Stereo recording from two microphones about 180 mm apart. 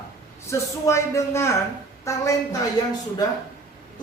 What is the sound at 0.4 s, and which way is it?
A man's voice, 15° left (ahead or behind).